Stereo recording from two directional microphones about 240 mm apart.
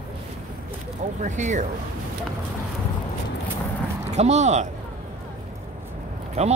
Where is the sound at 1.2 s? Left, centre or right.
Right.